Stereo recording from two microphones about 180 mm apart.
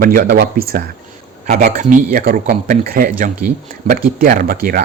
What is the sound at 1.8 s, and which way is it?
Speech, 50° right (ahead or behind).